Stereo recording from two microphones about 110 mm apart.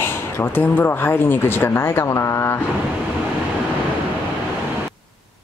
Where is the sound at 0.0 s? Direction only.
20° left (ahead or behind).